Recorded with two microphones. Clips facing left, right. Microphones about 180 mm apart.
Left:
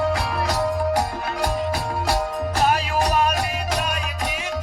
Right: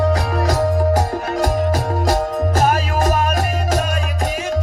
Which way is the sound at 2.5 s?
45° right (ahead or behind).